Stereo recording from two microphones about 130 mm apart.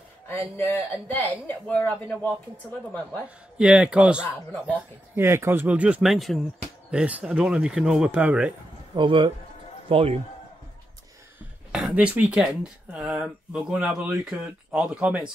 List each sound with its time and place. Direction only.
0.3 s speech: 15° left (ahead or behind)
3.5 s a man's voice: 5° right (ahead or behind)
6.1 s a man's voice: centre (ahead or behind)
8.9 s a man's voice: 40° right (ahead or behind)
11.7 s a man's voice: 5° right (ahead or behind)